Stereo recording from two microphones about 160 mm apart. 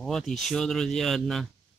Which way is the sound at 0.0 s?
Centre (ahead or behind).